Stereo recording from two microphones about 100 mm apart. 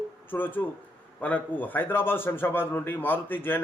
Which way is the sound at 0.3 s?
20° left (ahead or behind).